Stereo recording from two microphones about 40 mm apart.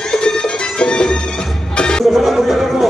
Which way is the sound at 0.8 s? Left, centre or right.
Left.